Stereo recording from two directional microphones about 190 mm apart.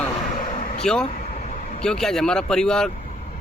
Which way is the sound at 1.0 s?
35° left (ahead or behind).